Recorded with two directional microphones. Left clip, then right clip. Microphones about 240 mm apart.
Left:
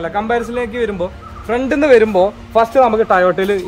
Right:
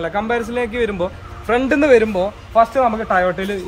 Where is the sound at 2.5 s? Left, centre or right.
Left.